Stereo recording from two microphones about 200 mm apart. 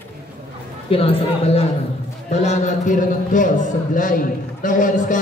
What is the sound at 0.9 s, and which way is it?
A man's voice, 30° left (ahead or behind).